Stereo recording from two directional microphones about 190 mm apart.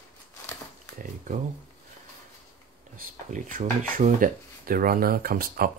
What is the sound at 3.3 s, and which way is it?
Speech, 45° right (ahead or behind).